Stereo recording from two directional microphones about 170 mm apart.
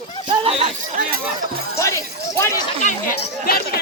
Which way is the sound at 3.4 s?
65° left (ahead or behind).